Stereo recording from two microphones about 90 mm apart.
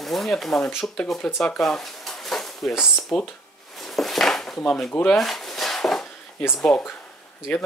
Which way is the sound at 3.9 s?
Centre (ahead or behind).